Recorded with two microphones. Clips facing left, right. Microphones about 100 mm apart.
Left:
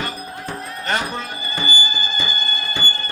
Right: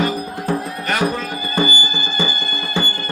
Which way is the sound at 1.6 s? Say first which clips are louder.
Right 3 dB; 35° left (ahead or behind).